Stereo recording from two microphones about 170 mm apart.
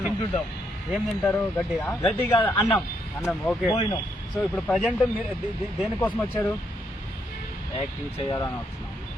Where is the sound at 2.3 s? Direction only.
30° left (ahead or behind).